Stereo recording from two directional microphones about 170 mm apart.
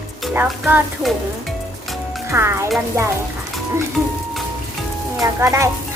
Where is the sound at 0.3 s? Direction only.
10° right (ahead or behind).